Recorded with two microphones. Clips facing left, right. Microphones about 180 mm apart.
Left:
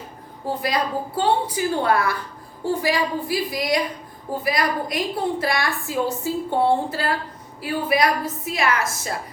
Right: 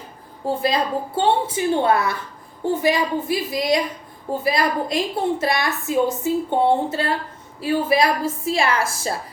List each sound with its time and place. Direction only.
0.4 s a woman's voice: 25° right (ahead or behind)